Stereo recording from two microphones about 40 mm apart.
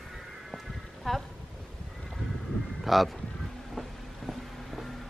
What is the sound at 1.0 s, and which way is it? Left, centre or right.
Speech, centre.